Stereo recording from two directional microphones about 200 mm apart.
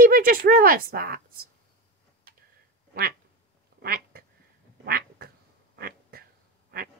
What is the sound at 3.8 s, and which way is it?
Quack, 50° right (ahead or behind).